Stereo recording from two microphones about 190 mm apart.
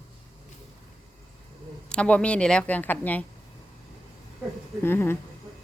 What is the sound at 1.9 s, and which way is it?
Speech, 5° left (ahead or behind).